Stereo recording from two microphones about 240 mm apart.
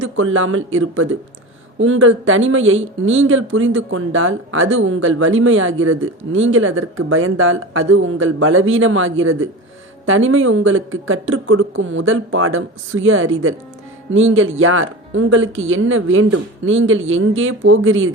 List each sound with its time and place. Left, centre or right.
0.0 s speech: right